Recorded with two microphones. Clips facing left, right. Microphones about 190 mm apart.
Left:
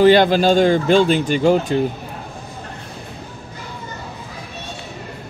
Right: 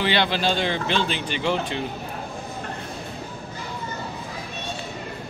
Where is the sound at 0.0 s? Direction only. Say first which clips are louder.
Left 11 dB; 45° left (ahead or behind).